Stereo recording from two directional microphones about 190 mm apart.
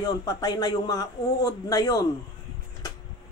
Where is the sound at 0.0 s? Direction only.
20° left (ahead or behind).